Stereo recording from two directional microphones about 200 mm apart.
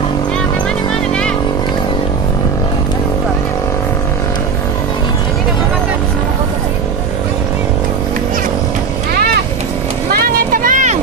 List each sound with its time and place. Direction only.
10.1 s vehicle: 40° right (ahead or behind)